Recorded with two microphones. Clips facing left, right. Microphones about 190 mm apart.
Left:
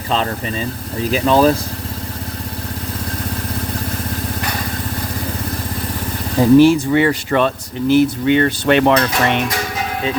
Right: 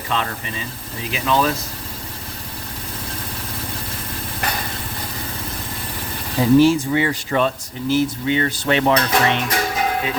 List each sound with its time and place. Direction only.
0.1 s speech: 30° left (ahead or behind)
6.4 s speech: 60° left (ahead or behind)